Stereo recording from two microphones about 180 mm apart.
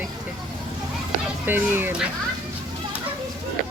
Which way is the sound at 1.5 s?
10° right (ahead or behind).